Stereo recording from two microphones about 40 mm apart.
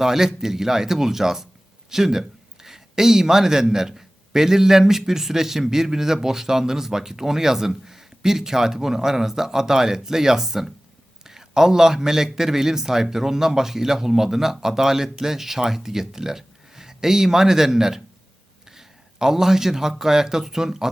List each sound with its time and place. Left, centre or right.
0.0 s a man's voice: centre